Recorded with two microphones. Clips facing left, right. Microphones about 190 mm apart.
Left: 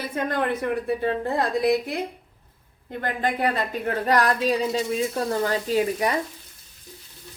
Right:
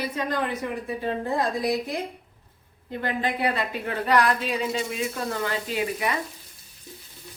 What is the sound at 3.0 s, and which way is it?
Speech, 45° left (ahead or behind).